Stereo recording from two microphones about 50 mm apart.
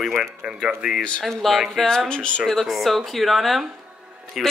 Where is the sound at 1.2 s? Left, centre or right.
Centre.